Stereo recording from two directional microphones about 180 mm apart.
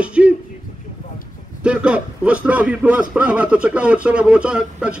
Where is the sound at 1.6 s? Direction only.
5° right (ahead or behind).